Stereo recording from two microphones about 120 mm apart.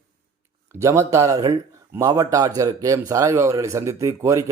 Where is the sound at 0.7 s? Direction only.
25° right (ahead or behind).